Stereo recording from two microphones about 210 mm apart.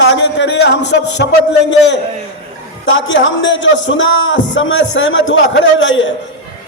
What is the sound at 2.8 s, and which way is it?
A man's voice, 65° left (ahead or behind).